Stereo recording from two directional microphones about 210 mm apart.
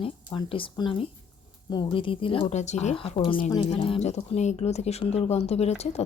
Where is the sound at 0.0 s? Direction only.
25° left (ahead or behind).